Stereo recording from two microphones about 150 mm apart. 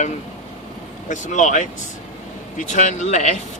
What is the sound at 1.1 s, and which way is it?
Speech, 55° left (ahead or behind).